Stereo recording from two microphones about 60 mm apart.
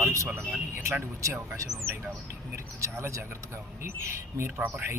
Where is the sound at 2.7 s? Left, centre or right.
Right.